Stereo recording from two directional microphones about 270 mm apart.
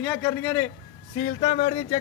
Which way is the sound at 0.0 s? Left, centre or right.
Centre.